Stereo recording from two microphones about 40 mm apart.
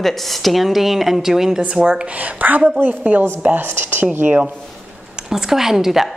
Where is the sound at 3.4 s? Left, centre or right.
Right.